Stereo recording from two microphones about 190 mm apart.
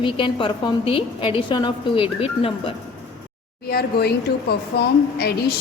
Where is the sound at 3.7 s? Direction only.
55° left (ahead or behind).